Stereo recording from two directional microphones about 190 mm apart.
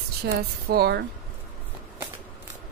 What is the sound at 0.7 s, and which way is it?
Speech, 55° right (ahead or behind).